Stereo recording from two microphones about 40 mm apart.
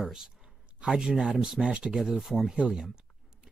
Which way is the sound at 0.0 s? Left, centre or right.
Centre.